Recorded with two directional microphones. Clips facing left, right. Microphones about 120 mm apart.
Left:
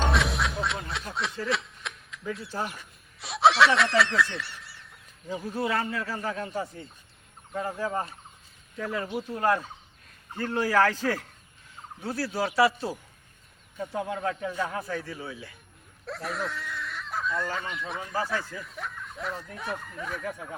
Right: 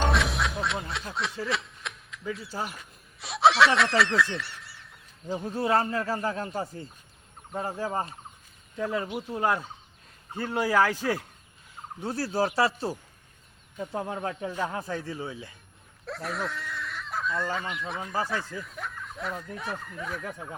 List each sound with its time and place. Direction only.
0.0 s a sound: centre (ahead or behind)
5.6 s a man's voice: 35° right (ahead or behind)
8.8 s a man's voice: 20° right (ahead or behind)
11.9 s speech: 30° right (ahead or behind)
12.3 s a man's voice: 40° right (ahead or behind)
13.9 s speech: 30° right (ahead or behind)
16.0 s speech: centre (ahead or behind)